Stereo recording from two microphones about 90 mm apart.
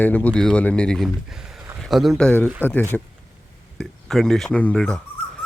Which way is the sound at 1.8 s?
Centre (ahead or behind).